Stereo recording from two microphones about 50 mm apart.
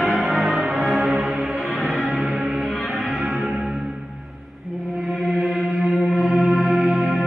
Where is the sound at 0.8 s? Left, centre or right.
Centre.